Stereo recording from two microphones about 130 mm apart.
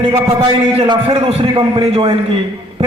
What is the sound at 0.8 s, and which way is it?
A man's voice, 45° right (ahead or behind).